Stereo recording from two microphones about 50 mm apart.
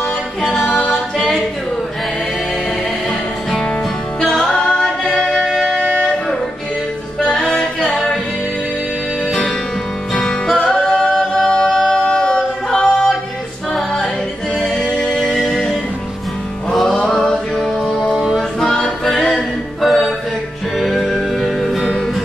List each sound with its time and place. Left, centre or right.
0.4 s music: centre
0.7 s a capella: left
0.9 s singing: centre
4.2 s music: centre
7.3 s music: centre
10.1 s music: centre
12.0 s singing: centre
14.6 s music: centre
17.1 s music: centre